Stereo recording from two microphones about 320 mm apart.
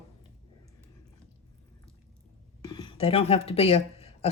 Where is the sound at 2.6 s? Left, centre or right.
Centre.